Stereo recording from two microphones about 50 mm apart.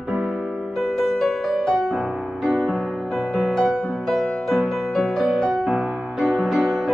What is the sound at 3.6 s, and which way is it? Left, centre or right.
Music, centre.